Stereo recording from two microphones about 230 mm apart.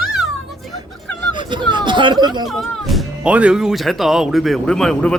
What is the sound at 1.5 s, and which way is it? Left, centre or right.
Chatter, centre.